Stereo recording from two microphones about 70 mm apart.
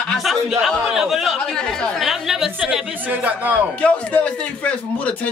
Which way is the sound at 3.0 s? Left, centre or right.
Right.